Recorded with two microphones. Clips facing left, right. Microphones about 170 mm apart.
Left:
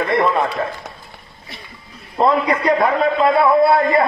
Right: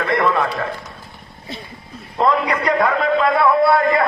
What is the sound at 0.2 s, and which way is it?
Speech, 20° left (ahead or behind).